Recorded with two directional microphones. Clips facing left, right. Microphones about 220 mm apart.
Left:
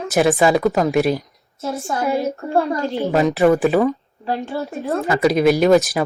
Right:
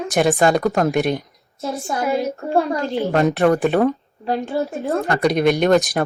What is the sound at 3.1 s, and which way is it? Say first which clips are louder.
Speech: left 2 dB; centre (ahead or behind).